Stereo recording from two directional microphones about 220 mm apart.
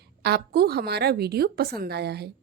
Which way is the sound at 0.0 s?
45° right (ahead or behind).